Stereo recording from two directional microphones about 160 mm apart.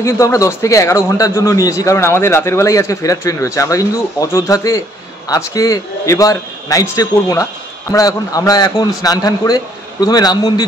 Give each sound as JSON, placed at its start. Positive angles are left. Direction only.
{"t": 0.0, "sound": "a man's voice", "side_deg": 20}